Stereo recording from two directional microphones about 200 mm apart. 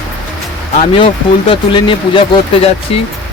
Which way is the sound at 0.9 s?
25° left (ahead or behind).